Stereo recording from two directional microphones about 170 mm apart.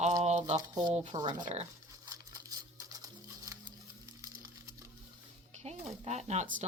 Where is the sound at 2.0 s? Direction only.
20° right (ahead or behind).